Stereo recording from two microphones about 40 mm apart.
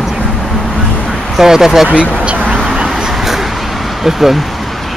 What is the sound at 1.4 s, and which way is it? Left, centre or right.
Speech, centre.